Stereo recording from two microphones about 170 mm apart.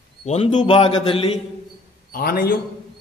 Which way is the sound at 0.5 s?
30° left (ahead or behind).